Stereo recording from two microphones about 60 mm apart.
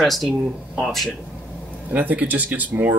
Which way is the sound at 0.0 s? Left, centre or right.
Centre.